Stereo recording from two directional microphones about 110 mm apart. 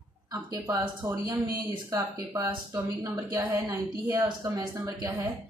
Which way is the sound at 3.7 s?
35° right (ahead or behind).